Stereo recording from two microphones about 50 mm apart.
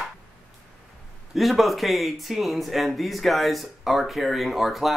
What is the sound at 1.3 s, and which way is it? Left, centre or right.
Speech, centre.